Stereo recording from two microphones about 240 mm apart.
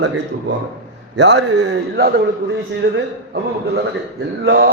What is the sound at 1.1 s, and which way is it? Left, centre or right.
A man's voice, right.